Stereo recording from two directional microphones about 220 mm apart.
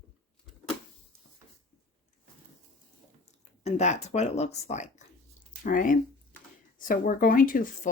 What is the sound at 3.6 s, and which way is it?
Speech, 30° left (ahead or behind).